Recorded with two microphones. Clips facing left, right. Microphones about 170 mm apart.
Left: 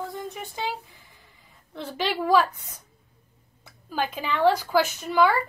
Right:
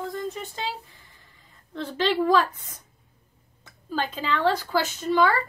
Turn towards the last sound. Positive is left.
turn(degrees=10)  # may be behind; listen again after turning